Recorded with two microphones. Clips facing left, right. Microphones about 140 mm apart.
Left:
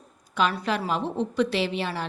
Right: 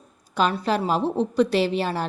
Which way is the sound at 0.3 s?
35° right (ahead or behind).